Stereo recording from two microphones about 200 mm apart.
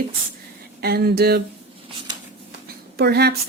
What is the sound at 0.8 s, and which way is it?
Speech, 50° right (ahead or behind).